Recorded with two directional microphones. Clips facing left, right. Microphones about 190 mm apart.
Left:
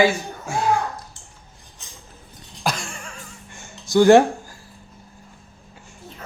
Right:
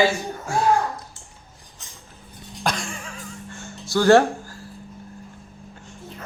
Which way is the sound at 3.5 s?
15° left (ahead or behind).